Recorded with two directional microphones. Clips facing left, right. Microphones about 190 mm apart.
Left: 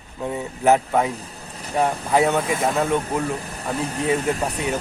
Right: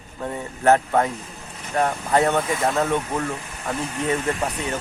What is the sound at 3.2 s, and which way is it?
Speech, 35° left (ahead or behind).